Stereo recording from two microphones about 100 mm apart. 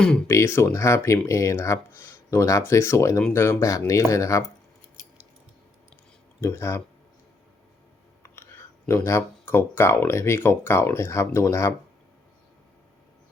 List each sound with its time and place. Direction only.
0.3 s speech: 30° left (ahead or behind)
6.4 s speech: 25° left (ahead or behind)
8.2 s speech: 25° left (ahead or behind)